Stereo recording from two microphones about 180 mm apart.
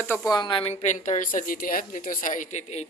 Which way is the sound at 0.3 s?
25° left (ahead or behind).